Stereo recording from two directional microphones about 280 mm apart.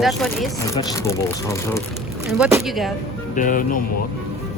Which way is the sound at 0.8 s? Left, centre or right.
Centre.